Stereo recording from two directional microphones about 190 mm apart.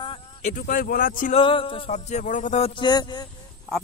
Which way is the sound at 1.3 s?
30° left (ahead or behind).